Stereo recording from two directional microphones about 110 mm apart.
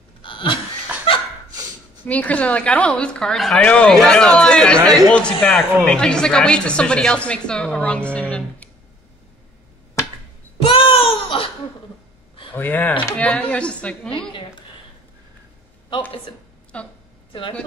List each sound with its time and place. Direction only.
0.2 s a sound: 50° left (ahead or behind)
1.1 s laughter: 55° left (ahead or behind)
2.0 s a woman's voice: 15° left (ahead or behind)
4.7 s speech: 35° right (ahead or behind)
5.1 s a woman's voice: 10° left (ahead or behind)
10.6 s a sound: 55° left (ahead or behind)
12.5 s a woman's voice: 15° left (ahead or behind)
16.7 s a woman's voice: 10° left (ahead or behind)
17.3 s speech: 50° left (ahead or behind)